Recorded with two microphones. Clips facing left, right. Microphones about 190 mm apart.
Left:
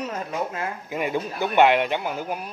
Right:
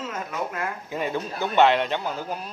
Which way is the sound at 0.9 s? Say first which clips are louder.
Left 3 dB; 10° left (ahead or behind).